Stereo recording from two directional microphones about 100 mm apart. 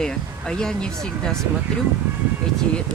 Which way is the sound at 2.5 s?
5° left (ahead or behind).